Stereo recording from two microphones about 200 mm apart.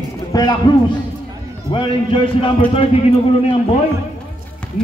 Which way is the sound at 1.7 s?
25° left (ahead or behind).